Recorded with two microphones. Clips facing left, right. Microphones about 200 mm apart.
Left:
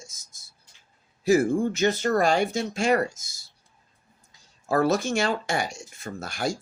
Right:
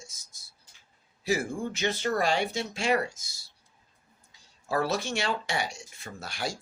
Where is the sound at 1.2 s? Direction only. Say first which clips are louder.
Left 9 dB; 45° left (ahead or behind).